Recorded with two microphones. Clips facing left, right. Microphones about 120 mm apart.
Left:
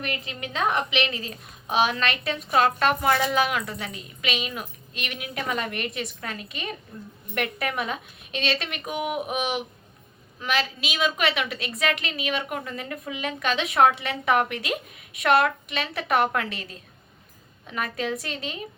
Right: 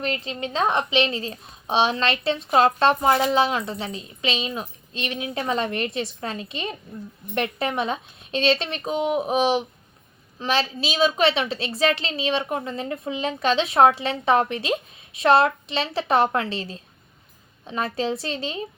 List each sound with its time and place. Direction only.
0.0 s a woman's voice: 30° right (ahead or behind)